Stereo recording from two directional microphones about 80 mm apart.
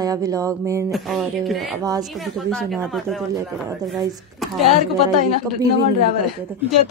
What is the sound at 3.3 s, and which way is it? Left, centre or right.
Speech, right.